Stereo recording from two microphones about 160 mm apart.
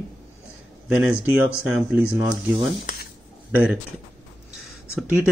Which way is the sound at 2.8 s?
70° left (ahead or behind).